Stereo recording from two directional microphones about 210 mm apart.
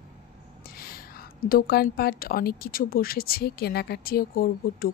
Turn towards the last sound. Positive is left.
turn(degrees=45)  # may be behind; listen again after turning